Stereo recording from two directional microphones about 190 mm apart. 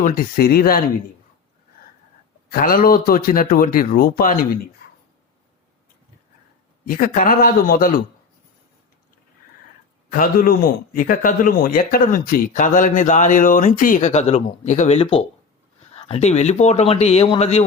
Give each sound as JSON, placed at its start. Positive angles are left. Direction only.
{"t": 0.0, "sound": "speech", "side_deg": 45}
{"t": 2.5, "sound": "speech", "side_deg": 50}
{"t": 6.8, "sound": "speech", "side_deg": 45}
{"t": 10.1, "sound": "speech", "side_deg": 50}